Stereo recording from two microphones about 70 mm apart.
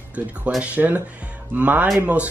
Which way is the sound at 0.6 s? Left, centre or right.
Right.